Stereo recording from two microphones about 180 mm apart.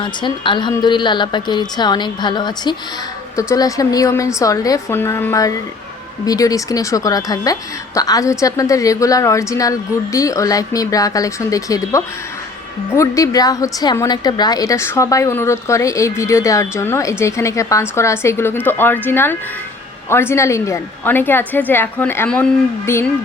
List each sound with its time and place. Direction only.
0.0 s a woman's voice: 25° left (ahead or behind)